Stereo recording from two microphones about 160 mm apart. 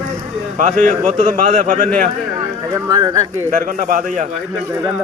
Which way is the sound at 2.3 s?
20° right (ahead or behind).